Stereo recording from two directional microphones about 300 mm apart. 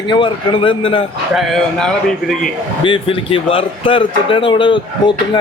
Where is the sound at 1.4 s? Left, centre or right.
Centre.